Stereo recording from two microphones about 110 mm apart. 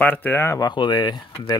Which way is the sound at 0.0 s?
15° left (ahead or behind).